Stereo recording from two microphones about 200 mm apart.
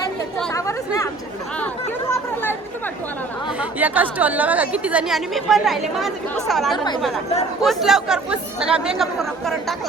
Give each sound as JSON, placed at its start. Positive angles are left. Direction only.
{"t": 0.5, "sound": "chatter", "side_deg": 15}
{"t": 3.6, "sound": "a woman's voice", "side_deg": -10}